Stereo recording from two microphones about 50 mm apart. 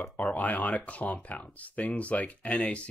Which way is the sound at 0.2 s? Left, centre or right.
Left.